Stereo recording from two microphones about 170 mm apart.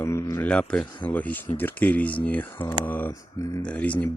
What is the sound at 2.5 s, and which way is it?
Speech, 30° left (ahead or behind).